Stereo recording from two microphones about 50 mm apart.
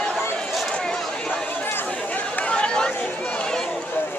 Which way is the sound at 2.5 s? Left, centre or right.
Centre.